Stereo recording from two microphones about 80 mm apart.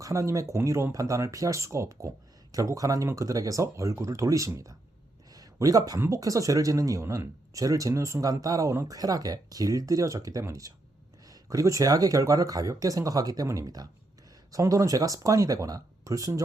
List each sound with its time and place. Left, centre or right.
0.0 s speech: right
5.3 s a sound: right
6.1 s speech: right